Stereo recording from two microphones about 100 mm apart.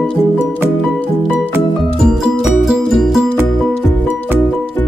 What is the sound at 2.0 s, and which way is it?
Music, 5° right (ahead or behind).